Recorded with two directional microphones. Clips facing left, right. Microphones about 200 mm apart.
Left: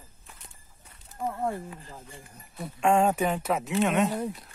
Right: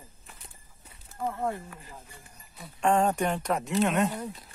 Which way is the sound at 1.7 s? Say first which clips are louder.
Left 3 dB; 20° left (ahead or behind).